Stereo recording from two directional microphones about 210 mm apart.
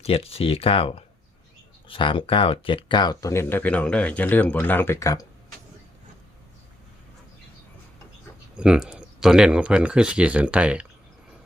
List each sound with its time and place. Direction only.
0.0 s speech: 25° left (ahead or behind)
8.5 s speech: 5° right (ahead or behind)